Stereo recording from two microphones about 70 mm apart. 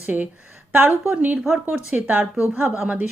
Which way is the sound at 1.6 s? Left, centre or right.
Right.